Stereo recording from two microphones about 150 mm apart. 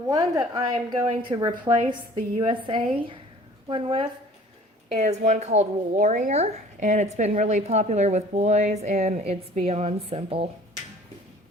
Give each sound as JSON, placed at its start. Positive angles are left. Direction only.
{"t": 0.1, "sound": "a woman's voice", "side_deg": -25}
{"t": 4.9, "sound": "speech", "side_deg": -45}